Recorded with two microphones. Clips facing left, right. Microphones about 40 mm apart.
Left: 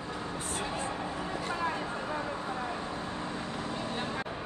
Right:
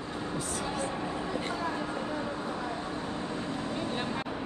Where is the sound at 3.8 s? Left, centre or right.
Right.